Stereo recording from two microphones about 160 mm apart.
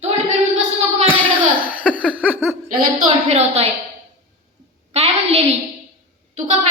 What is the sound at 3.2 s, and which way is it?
Speech, 40° right (ahead or behind).